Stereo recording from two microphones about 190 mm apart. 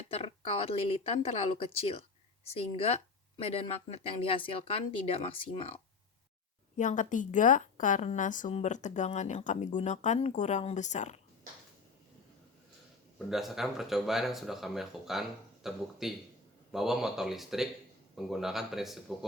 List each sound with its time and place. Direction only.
0.1 s speech: 30° left (ahead or behind)
6.7 s speech: 40° left (ahead or behind)
13.1 s speech: centre (ahead or behind)